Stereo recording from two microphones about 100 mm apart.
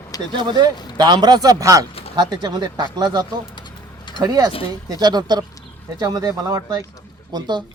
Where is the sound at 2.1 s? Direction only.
45° right (ahead or behind).